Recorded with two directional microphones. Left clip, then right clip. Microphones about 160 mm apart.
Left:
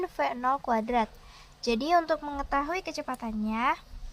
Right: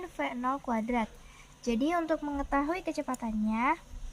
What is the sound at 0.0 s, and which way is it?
A woman's voice, 35° left (ahead or behind).